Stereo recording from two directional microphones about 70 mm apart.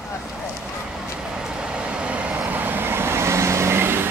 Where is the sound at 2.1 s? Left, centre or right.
Right.